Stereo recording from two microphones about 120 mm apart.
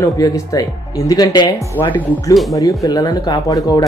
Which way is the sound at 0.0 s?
30° left (ahead or behind).